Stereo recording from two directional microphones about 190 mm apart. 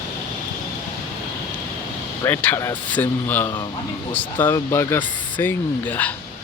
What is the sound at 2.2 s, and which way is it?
Speech, 10° left (ahead or behind).